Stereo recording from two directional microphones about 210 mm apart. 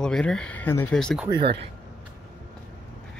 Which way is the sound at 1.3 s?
25° right (ahead or behind).